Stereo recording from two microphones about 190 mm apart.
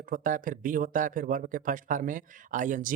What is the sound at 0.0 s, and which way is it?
Speech, 45° right (ahead or behind).